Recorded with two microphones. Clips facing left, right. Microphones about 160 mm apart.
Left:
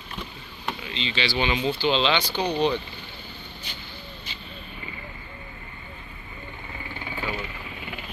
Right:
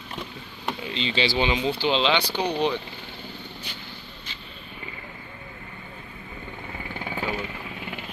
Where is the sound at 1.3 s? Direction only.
20° right (ahead or behind).